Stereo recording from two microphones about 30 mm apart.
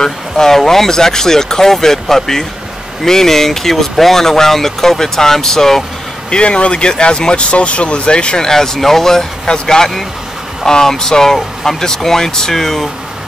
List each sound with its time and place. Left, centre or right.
0.0 s speech: centre
6.3 s speech: left
7.5 s speech: left
8.5 s speech: centre